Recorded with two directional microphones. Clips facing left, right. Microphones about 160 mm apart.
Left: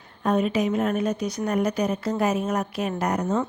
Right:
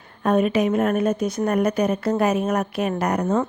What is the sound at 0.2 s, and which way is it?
A woman's voice, 60° right (ahead or behind).